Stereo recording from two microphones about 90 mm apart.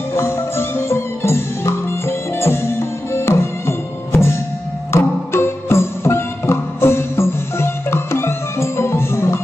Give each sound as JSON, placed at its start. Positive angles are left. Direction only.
{"t": 0.1, "sound": "music", "side_deg": 30}